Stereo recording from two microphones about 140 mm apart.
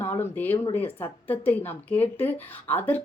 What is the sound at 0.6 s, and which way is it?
Speech, 15° left (ahead or behind).